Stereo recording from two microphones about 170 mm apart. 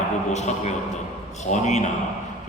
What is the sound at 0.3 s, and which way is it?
A man's voice, 40° left (ahead or behind).